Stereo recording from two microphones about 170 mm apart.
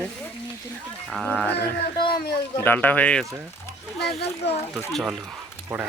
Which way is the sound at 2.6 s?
10° left (ahead or behind).